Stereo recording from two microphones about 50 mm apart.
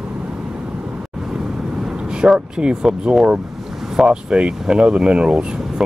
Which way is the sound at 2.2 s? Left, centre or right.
Centre.